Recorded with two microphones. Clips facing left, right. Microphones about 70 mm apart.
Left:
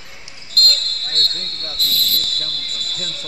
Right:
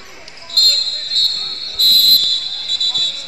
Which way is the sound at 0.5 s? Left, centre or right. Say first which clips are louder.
Left 1 dB; right.